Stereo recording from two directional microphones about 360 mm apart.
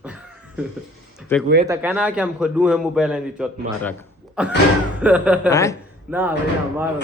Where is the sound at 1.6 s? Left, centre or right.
Centre.